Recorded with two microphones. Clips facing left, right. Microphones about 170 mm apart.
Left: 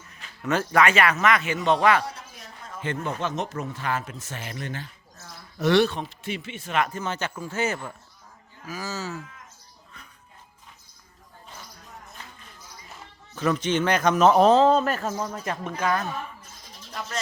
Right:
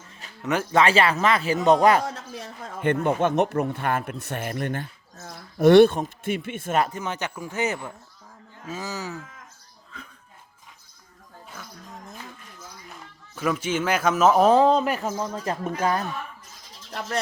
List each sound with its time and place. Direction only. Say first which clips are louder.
0.4 s speech: even; 15° right (ahead or behind)
0.8 s speech: right 1 dB; 30° right (ahead or behind)
2.3 s speech: right 6 dB; 70° right (ahead or behind); by 6.8 s 50° right (ahead or behind)
6.9 s speech: even; 15° right (ahead or behind)
13.3 s speech: left 1 dB; 10° right (ahead or behind)
15.8 s speech: right 1 dB; 35° right (ahead or behind)